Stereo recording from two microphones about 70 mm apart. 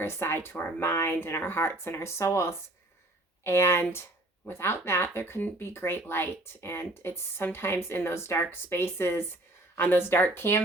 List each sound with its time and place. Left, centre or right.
0.0 s speech: left